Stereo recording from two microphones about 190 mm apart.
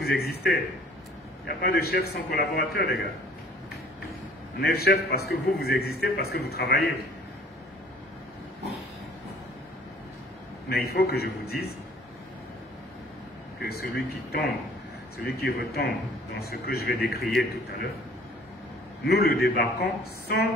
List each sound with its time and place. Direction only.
0.0 s a man's voice: 55° left (ahead or behind)
4.6 s a man's voice: 55° left (ahead or behind)
10.7 s a man's voice: 55° left (ahead or behind)
13.6 s a man's voice: 55° left (ahead or behind)
19.0 s a man's voice: 55° left (ahead or behind)